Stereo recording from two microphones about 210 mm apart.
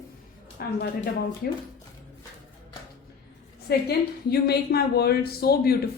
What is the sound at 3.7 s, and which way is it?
A woman's voice, 50° left (ahead or behind).